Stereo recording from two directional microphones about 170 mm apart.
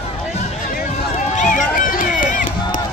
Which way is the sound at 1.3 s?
50° left (ahead or behind).